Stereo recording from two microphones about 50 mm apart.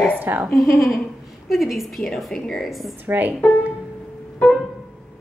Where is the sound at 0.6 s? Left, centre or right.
Centre.